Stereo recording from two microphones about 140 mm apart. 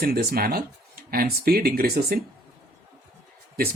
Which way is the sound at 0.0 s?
90° right.